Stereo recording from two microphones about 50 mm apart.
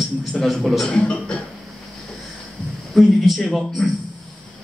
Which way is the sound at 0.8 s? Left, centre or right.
Centre.